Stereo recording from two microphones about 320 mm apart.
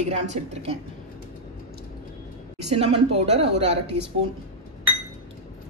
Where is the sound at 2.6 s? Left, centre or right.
Centre.